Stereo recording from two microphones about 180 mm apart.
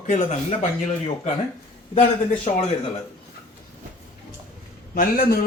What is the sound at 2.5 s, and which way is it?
Speech, 35° left (ahead or behind).